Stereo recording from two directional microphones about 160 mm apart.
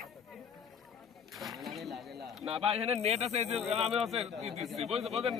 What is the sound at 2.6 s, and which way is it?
Speech, 40° right (ahead or behind).